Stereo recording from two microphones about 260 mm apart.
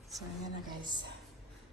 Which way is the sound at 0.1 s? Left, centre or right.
Centre.